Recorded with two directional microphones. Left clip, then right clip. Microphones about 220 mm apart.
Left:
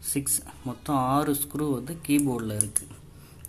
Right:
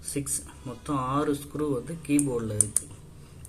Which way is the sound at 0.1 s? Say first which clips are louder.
Left 2 dB; 50° left (ahead or behind).